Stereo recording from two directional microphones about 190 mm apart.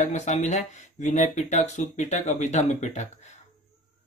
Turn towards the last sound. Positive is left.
turn(degrees=35)  # may be behind; listen again after turning